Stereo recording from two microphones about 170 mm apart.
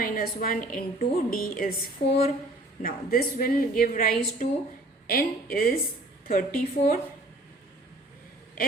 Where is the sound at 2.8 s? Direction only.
60° left (ahead or behind).